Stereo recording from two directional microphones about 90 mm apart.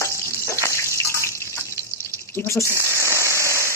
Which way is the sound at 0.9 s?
35° left (ahead or behind).